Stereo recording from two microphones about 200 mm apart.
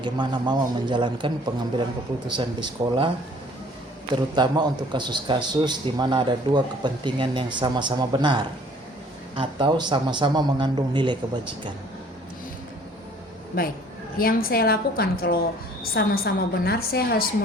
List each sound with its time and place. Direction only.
0.0 s a man's voice: 20° right (ahead or behind)
4.4 s a man's voice: 20° right (ahead or behind)
14.2 s a woman's voice: 45° left (ahead or behind)